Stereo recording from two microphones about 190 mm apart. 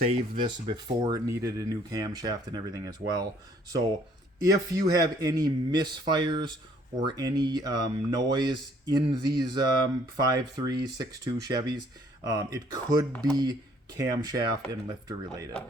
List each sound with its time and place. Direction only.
0.0 s speech: 30° right (ahead or behind)
4.4 s speech: 20° right (ahead or behind)